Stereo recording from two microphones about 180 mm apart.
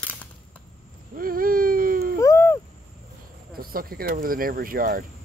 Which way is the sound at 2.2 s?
15° left (ahead or behind).